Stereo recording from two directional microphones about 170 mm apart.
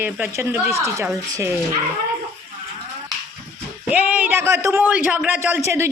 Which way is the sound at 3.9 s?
10° right (ahead or behind).